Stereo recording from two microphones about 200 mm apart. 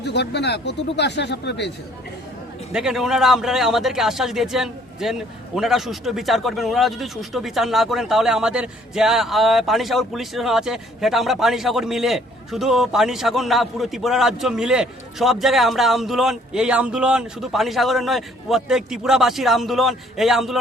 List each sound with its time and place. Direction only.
0.0 s speech: 55° left (ahead or behind)
2.7 s a man's voice: 5° right (ahead or behind)